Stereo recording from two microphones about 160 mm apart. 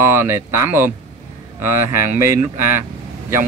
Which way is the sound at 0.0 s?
15° right (ahead or behind).